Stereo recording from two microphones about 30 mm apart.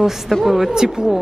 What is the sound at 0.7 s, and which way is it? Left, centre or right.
Speech, right.